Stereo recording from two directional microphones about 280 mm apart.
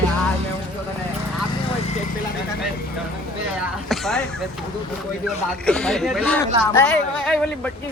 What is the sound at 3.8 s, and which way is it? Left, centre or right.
Speech, centre.